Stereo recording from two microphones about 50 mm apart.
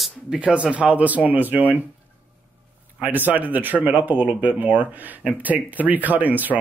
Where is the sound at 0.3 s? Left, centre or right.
Right.